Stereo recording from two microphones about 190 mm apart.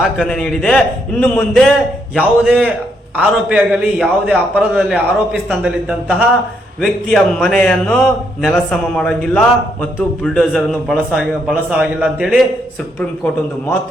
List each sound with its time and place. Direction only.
0.0 s a man's voice: centre (ahead or behind)
6.8 s a man's voice: 5° left (ahead or behind)